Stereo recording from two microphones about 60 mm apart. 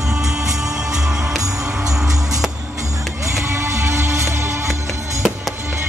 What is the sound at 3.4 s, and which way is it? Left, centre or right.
Music, right.